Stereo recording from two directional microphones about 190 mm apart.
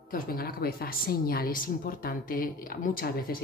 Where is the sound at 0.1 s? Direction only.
50° left (ahead or behind).